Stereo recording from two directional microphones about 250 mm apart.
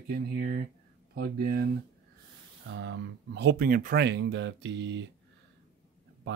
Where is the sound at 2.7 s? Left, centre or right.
Right.